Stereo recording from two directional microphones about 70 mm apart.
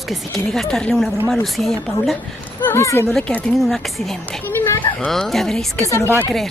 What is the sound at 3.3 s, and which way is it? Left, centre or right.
Speech, centre.